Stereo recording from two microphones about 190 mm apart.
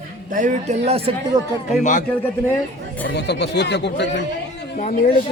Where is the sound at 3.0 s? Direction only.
65° left (ahead or behind).